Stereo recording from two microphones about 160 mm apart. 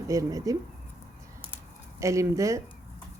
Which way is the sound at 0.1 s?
20° right (ahead or behind).